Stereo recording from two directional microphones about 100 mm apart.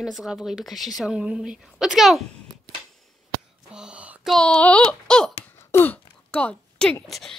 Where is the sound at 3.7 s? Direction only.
10° right (ahead or behind).